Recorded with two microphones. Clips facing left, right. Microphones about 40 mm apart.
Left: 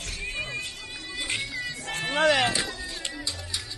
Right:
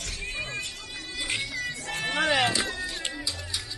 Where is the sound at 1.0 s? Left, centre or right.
Centre.